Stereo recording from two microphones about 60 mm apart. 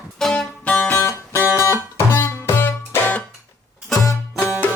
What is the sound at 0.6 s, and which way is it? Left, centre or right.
Music, left.